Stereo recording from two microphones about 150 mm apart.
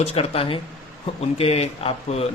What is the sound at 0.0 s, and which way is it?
Speech, 40° left (ahead or behind).